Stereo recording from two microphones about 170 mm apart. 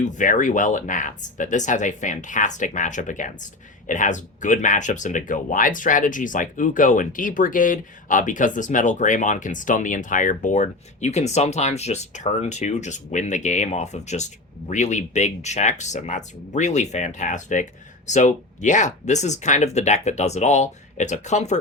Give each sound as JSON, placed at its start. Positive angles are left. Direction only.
{"t": 0.0, "sound": "speech", "side_deg": 45}